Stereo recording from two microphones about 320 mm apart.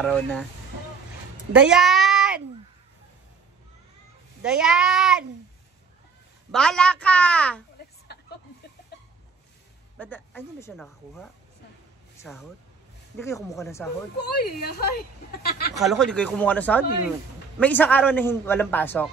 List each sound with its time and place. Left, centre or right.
0.0 s a man's voice: centre
1.5 s a child's voice: centre
4.4 s a man's voice: centre
6.5 s a man's voice: centre
8.1 s a sound: left
9.9 s a man's voice: centre
14.1 s speech: left
15.8 s a man's voice: centre